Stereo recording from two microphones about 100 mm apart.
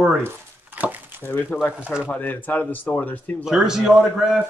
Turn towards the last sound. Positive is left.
turn(degrees=-5)  # may be behind; listen again after turning